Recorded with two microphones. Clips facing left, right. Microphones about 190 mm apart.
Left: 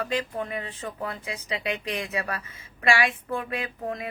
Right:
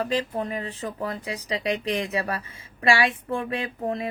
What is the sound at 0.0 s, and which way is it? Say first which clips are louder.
Speech: right 3 dB; 35° right (ahead or behind).